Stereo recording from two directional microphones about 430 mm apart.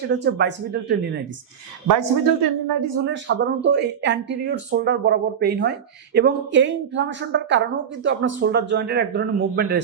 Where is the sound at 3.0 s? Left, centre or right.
Right.